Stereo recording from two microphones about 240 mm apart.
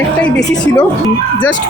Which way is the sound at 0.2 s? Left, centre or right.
Centre.